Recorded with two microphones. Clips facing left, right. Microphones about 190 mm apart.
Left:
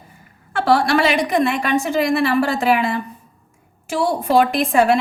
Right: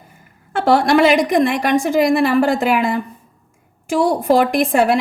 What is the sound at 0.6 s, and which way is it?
A woman's voice, 55° right (ahead or behind).